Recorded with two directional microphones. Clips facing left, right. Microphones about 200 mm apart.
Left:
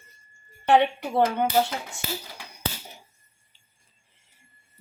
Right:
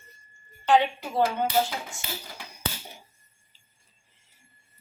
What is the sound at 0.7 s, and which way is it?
Speech, 60° left (ahead or behind).